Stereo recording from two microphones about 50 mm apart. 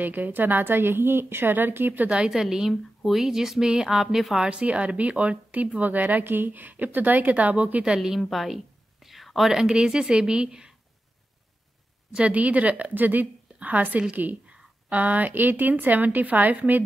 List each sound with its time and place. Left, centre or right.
0.0 s a woman's voice: right
2.0 s speech: centre
4.5 s speech: right
7.9 s a woman's voice: centre
9.0 s whispering: centre
9.5 s speech: centre
12.1 s speech: right